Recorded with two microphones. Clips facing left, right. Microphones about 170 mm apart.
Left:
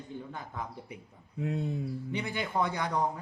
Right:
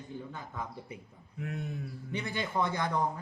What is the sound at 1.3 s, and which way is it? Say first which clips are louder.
Speech: left 5 dB; 25° left (ahead or behind).